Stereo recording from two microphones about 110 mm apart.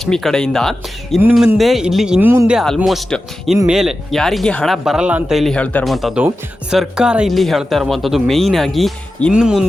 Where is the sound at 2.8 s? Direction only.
Centre (ahead or behind).